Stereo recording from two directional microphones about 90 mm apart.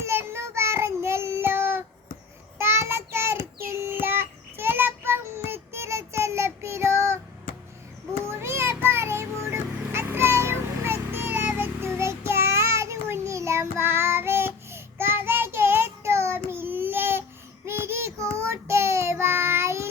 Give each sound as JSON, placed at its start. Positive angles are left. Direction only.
{"t": 0.0, "sound": "child singing", "side_deg": -30}
{"t": 8.3, "sound": "child singing", "side_deg": -30}
{"t": 9.9, "sound": "a sound", "side_deg": -25}
{"t": 17.7, "sound": "child singing", "side_deg": -25}